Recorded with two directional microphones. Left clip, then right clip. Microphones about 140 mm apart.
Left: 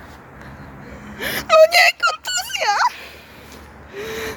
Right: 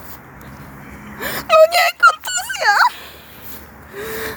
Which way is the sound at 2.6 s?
10° right (ahead or behind).